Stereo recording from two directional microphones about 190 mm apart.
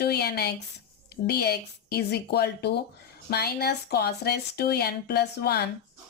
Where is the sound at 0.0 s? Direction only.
55° left (ahead or behind).